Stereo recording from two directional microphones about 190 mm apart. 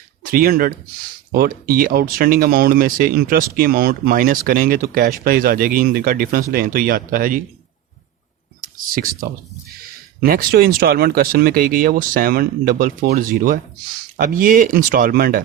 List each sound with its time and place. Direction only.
0.2 s speech: 45° right (ahead or behind)
10.2 s speech: 50° right (ahead or behind)